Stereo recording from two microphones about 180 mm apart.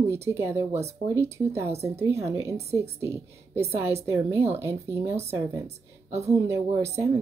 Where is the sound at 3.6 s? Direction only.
15° right (ahead or behind).